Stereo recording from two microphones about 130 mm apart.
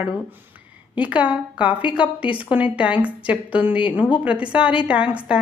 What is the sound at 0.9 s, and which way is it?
A woman's voice, 10° right (ahead or behind).